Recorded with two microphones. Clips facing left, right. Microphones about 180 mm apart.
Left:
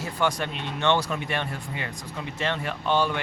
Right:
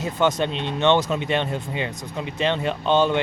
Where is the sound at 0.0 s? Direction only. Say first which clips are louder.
Right 5 dB; 20° right (ahead or behind).